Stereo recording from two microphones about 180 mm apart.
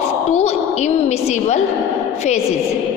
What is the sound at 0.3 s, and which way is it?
A woman's voice, 40° left (ahead or behind).